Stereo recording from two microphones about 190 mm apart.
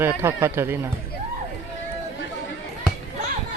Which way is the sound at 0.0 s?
15° right (ahead or behind).